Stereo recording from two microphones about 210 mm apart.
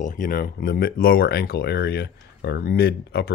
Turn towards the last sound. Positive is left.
turn(degrees=50)  # may be behind; listen again after turning